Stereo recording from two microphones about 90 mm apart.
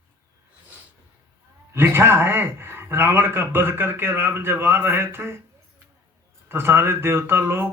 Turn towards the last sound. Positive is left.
turn(degrees=-25)  # may be behind; listen again after turning